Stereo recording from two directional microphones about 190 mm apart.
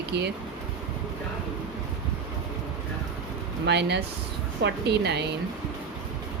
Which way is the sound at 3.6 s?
65° right (ahead or behind).